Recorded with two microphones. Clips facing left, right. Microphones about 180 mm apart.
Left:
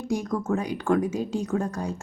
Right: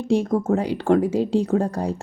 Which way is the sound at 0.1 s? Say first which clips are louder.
Right 7 dB; 30° right (ahead or behind).